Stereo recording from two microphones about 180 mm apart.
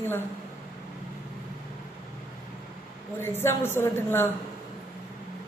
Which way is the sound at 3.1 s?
15° left (ahead or behind).